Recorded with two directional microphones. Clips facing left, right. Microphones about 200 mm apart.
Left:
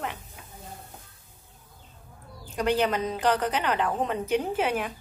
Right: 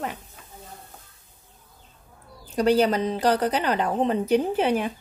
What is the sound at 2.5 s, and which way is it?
A woman's voice, 35° right (ahead or behind).